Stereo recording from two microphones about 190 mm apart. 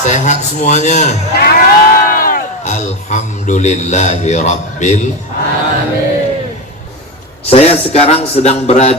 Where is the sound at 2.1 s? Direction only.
50° left (ahead or behind).